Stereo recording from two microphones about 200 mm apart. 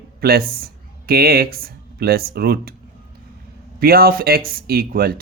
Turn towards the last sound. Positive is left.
turn(degrees=-50)  # may be behind; listen again after turning